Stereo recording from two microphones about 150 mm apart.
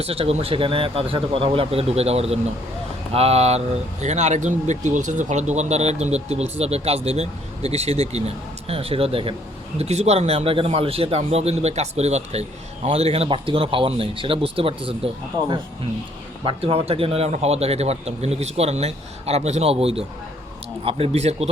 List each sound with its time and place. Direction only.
0.0 s a man's voice: 40° right (ahead or behind)